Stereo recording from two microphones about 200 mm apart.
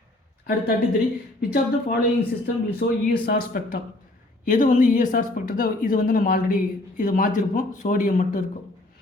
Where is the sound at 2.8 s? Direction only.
55° left (ahead or behind).